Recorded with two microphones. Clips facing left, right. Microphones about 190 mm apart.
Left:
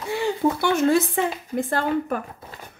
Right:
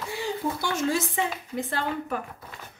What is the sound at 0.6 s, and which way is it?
A woman's voice, 60° left (ahead or behind).